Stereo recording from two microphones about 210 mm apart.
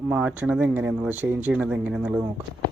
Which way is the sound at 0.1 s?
5° right (ahead or behind).